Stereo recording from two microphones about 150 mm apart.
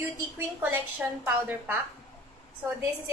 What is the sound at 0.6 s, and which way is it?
A woman's voice, 10° right (ahead or behind).